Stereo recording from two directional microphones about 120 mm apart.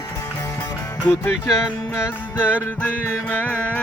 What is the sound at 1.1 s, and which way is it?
Music, 20° left (ahead or behind).